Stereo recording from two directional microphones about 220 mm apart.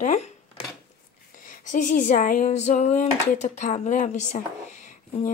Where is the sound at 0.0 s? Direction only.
35° left (ahead or behind).